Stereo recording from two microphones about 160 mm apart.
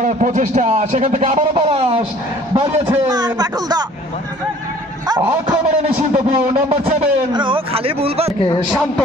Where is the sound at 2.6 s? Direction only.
25° right (ahead or behind).